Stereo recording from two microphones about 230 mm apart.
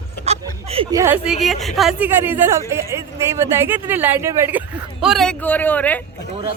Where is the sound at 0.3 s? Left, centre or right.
Right.